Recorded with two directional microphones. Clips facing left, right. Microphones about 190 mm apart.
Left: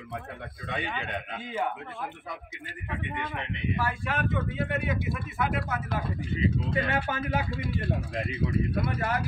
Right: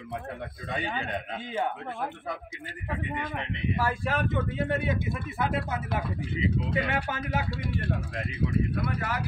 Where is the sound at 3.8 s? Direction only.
35° right (ahead or behind).